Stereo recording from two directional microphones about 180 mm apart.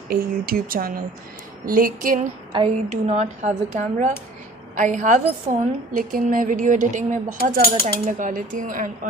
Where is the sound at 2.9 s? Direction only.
40° right (ahead or behind).